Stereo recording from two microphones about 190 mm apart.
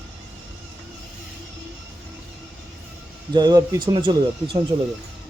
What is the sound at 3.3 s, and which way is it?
Speech, 20° right (ahead or behind).